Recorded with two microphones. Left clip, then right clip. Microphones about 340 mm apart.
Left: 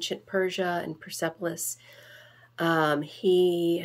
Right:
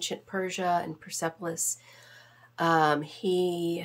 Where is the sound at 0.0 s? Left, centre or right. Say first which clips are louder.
Left 4 dB; right.